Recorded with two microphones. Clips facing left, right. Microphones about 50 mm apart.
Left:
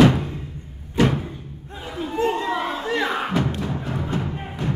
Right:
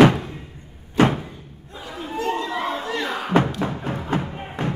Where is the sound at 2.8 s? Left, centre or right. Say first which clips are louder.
Left 3 dB; centre.